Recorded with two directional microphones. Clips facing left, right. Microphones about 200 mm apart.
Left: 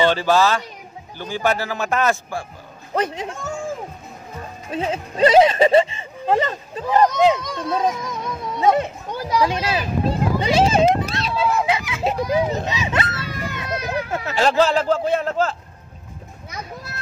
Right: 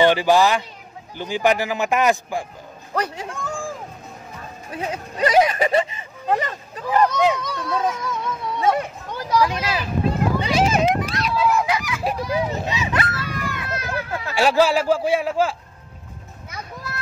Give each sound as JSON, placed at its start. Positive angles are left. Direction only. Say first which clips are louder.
{"t": 0.0, "sound": "a man's voice", "louder": "right 1 dB", "side_deg": -15}
{"t": 2.9, "sound": "speech", "louder": "left 3 dB", "side_deg": 20}
{"t": 4.6, "sound": "a child's voice", "louder": "left 4 dB", "side_deg": 25}
{"t": 14.6, "sound": "a man's voice", "louder": "right 1 dB", "side_deg": -10}